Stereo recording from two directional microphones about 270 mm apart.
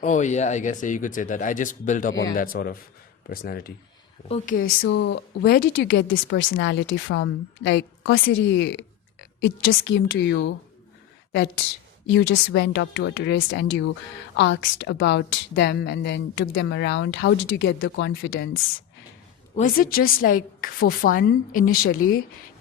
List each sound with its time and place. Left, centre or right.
0.0 s a woman's voice: left
4.5 s a woman's voice: left
19.5 s a woman's voice: left